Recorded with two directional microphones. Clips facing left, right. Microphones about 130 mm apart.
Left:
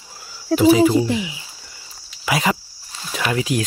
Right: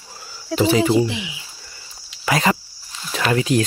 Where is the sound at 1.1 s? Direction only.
40° left (ahead or behind).